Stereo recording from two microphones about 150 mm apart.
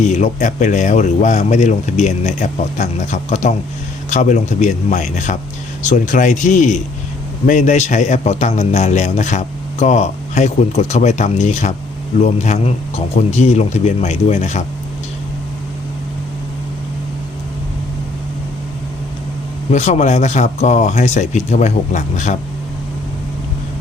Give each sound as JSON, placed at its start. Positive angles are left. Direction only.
{"t": 0.0, "sound": "a man's voice", "side_deg": 50}
{"t": 19.7, "sound": "a man's voice", "side_deg": 50}